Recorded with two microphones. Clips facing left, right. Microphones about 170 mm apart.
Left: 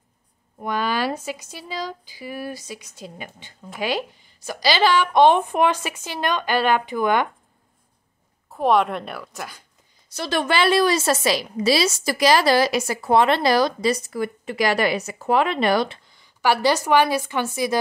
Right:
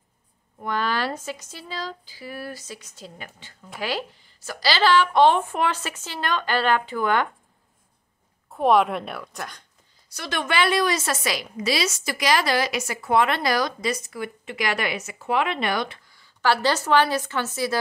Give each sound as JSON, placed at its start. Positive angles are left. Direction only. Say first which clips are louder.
{"t": 0.6, "sound": "a woman's voice", "louder": "left 2 dB", "side_deg": 15}
{"t": 8.5, "sound": "a woman's voice", "louder": "even", "side_deg": 0}
{"t": 10.0, "sound": "a woman's voice", "louder": "left 5 dB", "side_deg": 30}
{"t": 16.1, "sound": "a woman's voice", "louder": "right 1 dB", "side_deg": 15}